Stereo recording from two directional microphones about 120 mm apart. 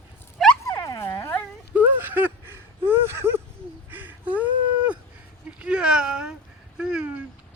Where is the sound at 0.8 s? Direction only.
25° left (ahead or behind).